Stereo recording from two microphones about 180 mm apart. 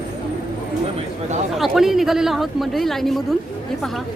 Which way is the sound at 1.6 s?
Centre (ahead or behind).